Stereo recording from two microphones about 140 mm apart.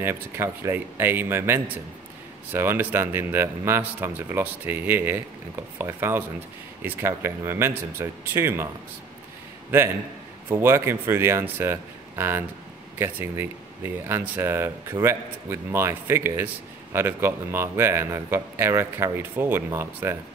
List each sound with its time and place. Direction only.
0.0 s speech: 15° right (ahead or behind)
9.7 s a man's voice: 15° right (ahead or behind)